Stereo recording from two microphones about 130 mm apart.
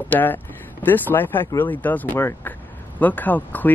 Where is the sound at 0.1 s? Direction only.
15° left (ahead or behind).